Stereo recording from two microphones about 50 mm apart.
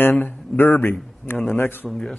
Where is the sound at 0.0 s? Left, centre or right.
Left.